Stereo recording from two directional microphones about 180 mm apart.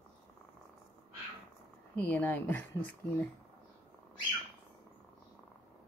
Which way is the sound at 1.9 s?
10° left (ahead or behind).